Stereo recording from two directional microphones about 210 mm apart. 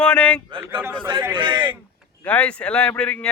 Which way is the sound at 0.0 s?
5° left (ahead or behind).